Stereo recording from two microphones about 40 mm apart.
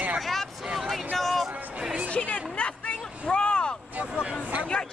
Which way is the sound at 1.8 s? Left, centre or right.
Right.